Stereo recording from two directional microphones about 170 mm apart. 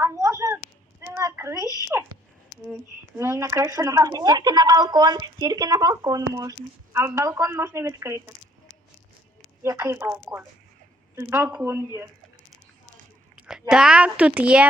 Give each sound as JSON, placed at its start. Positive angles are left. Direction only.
{"t": 0.0, "sound": "a sound", "side_deg": -15}
{"t": 3.2, "sound": "speech", "side_deg": -15}
{"t": 9.6, "sound": "speech", "side_deg": -15}
{"t": 13.3, "sound": "a woman's voice", "side_deg": -5}